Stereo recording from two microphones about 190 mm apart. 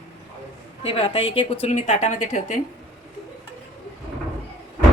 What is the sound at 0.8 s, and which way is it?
Speech, 30° left (ahead or behind).